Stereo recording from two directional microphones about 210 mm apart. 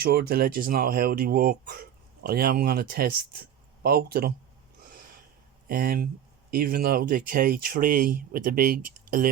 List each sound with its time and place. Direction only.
0.0 s speech: 50° right (ahead or behind)
5.6 s speech: 45° right (ahead or behind)